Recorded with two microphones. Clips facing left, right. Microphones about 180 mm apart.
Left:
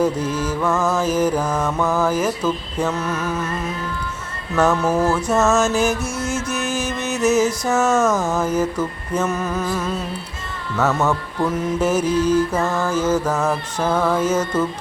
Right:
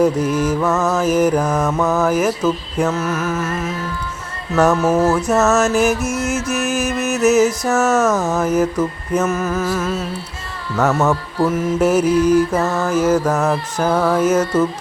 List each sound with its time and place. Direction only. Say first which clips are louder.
0.0 s mantra: right 4 dB; 10° right (ahead or behind)
6.3 s music: right 3 dB; 30° left (ahead or behind)
6.7 s music: right 4 dB; 5° right (ahead or behind)
7.7 s mantra: right 2 dB; 5° right (ahead or behind)
9.1 s mantra: right 3 dB; 5° right (ahead or behind)